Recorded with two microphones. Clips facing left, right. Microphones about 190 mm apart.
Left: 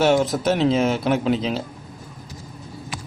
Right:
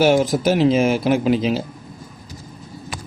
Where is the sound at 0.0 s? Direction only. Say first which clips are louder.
Right 2 dB; 10° right (ahead or behind).